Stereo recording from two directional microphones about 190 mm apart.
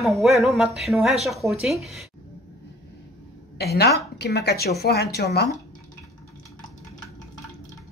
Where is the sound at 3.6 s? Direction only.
60° left (ahead or behind).